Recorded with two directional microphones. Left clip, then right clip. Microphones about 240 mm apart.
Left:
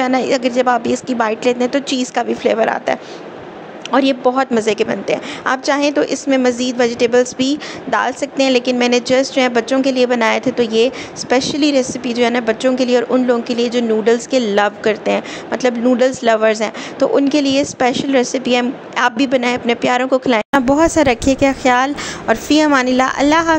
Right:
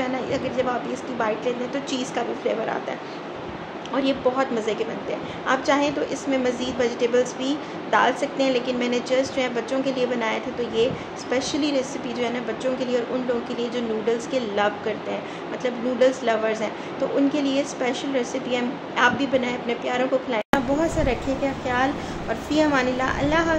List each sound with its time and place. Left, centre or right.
0.0 s a woman's voice: left